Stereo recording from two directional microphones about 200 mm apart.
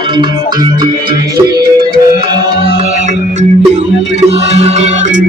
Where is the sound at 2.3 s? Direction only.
30° right (ahead or behind).